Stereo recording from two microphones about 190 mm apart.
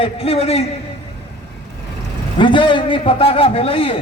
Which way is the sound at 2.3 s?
25° left (ahead or behind).